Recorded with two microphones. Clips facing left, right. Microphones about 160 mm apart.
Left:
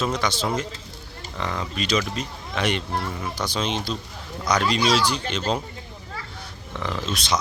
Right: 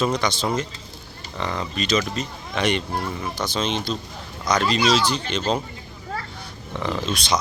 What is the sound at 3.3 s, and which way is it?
Speech, 10° left (ahead or behind).